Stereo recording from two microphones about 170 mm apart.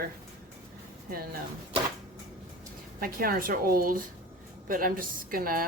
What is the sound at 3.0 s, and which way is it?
A woman's voice, 60° right (ahead or behind).